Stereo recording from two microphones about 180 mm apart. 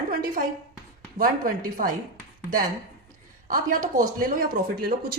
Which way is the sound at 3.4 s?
50° right (ahead or behind).